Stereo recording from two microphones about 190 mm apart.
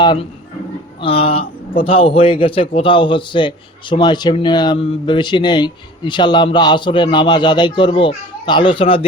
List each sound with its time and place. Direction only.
1.0 s a man's voice: 30° left (ahead or behind)